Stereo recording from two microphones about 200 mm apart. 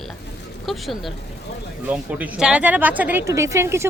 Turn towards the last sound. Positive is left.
turn(degrees=-15)  # may be behind; listen again after turning